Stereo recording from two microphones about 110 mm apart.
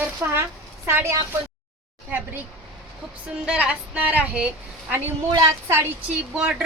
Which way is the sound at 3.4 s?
10° right (ahead or behind).